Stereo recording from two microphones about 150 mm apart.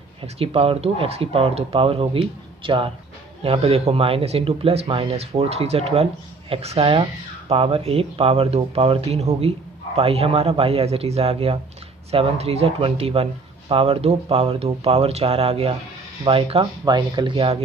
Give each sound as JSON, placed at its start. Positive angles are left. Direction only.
{"t": 0.2, "sound": "speech", "side_deg": -40}